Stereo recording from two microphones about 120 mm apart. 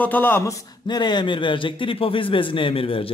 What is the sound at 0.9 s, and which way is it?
A man's voice, 40° left (ahead or behind).